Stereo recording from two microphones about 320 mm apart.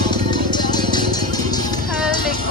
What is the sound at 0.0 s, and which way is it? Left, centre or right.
Music, centre.